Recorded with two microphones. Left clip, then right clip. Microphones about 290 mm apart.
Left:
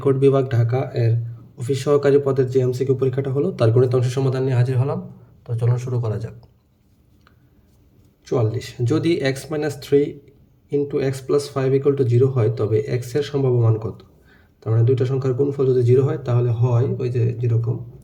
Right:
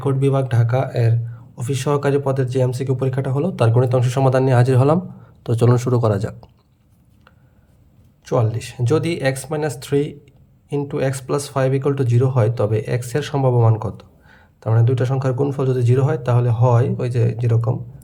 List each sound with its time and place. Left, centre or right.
0.0 s speech: centre
8.2 s speech: centre